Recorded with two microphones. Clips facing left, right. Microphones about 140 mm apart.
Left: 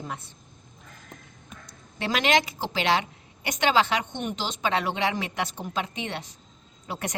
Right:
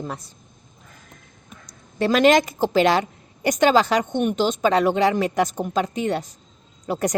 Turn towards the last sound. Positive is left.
turn(degrees=-40)  # may be behind; listen again after turning